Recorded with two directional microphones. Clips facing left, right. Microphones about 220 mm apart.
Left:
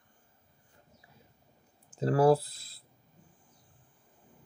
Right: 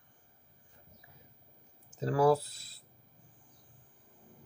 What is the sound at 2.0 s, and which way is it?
Speech, 35° left (ahead or behind).